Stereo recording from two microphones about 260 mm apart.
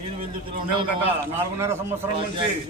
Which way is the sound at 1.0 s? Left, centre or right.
Centre.